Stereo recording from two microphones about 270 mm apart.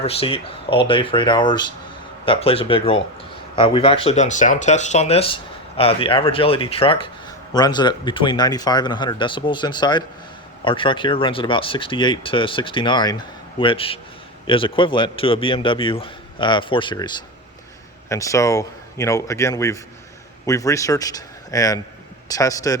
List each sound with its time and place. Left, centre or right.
0.0 s speech: left